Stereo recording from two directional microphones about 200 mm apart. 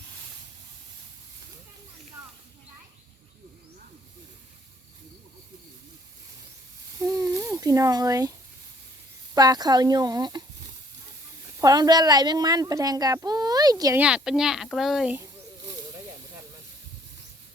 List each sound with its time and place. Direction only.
7.1 s a sound: 15° right (ahead or behind)
9.3 s speech: 20° right (ahead or behind)
11.6 s speech: 20° right (ahead or behind)
14.0 s speech: 5° right (ahead or behind)